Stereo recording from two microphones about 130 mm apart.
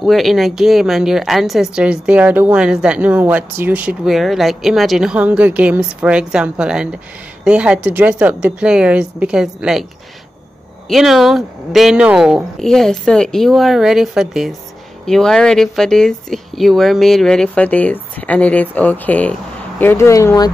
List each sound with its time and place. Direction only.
0.0 s a woman's voice: centre (ahead or behind)
10.9 s a woman's voice: centre (ahead or behind); by 20.5 s 25° left (ahead or behind)